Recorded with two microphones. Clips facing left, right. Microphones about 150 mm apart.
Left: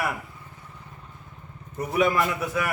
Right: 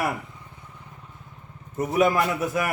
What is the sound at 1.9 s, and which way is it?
Speech, 40° right (ahead or behind).